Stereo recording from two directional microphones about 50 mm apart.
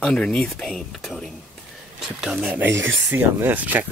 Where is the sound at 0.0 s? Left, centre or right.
Centre.